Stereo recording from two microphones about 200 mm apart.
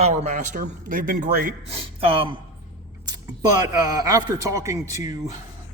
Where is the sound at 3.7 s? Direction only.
15° right (ahead or behind).